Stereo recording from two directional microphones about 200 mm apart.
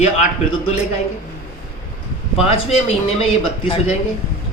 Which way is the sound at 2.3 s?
30° left (ahead or behind).